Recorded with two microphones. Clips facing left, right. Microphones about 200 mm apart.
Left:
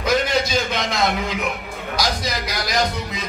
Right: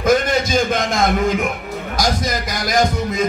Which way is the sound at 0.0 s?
50° right (ahead or behind).